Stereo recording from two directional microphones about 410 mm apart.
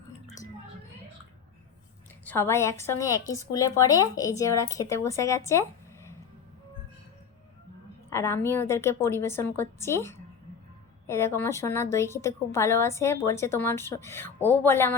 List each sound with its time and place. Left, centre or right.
2.2 s a woman's voice: centre
8.1 s a woman's voice: centre